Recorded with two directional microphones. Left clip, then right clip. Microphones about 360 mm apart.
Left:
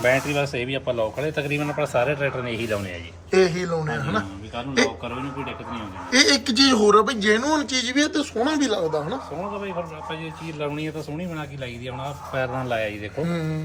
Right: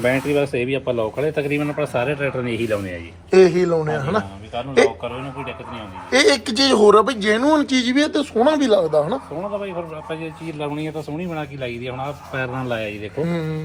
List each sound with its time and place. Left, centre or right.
0.0 s a man's voice: centre
3.3 s a man's voice: centre
6.1 s a man's voice: centre
10.8 s a man's voice: centre
13.2 s speech: centre